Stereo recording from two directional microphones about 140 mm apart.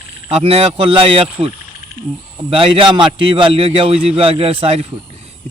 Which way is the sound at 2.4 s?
40° right (ahead or behind).